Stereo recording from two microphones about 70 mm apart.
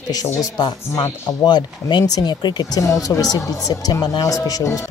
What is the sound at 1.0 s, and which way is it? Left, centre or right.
Speech, left.